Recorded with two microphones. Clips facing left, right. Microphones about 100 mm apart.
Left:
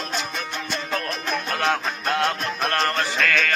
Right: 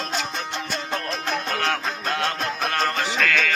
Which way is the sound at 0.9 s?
25° right (ahead or behind).